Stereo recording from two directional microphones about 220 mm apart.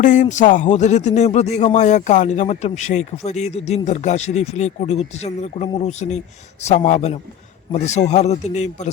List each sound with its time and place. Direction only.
0.0 s speech: 35° left (ahead or behind)